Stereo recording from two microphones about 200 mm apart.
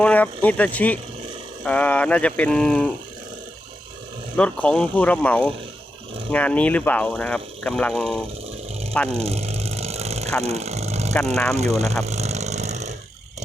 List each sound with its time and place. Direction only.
0.0 s speech: 5° left (ahead or behind)
4.4 s speech: 5° left (ahead or behind)
9.0 s vehicle: 30° right (ahead or behind)
11.5 s speech: 30° right (ahead or behind)
12.0 s vehicle: 35° right (ahead or behind)